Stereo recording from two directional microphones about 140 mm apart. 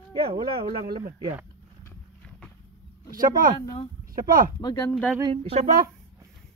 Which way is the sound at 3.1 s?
90° right.